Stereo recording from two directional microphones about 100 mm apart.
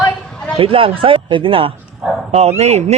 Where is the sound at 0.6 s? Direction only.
65° right (ahead or behind).